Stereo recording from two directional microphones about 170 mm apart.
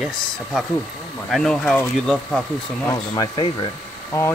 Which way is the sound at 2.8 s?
20° left (ahead or behind).